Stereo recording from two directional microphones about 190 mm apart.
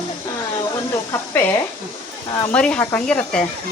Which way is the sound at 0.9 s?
15° left (ahead or behind).